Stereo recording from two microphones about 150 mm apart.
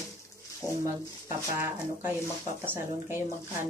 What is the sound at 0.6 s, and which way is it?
Speech, 5° left (ahead or behind).